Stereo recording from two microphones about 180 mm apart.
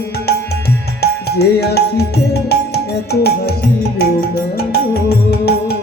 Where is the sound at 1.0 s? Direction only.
65° left (ahead or behind).